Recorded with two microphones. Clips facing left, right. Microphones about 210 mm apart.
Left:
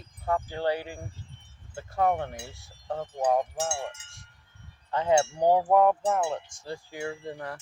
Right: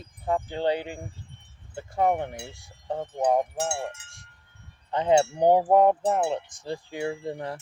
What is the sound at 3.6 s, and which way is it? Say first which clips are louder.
Wind chime: right 2 dB; 60° right (ahead or behind).